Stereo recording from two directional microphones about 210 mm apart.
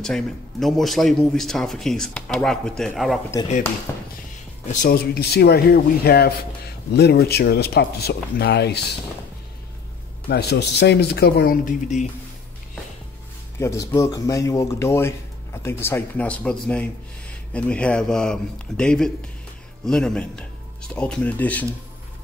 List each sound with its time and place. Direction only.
0.0 s speech: centre (ahead or behind)
3.9 s music: 15° left (ahead or behind)
4.7 s speech: 45° left (ahead or behind)
10.3 s speech: 55° left (ahead or behind); by 12.1 s 40° left (ahead or behind)
13.6 s speech: 15° left (ahead or behind)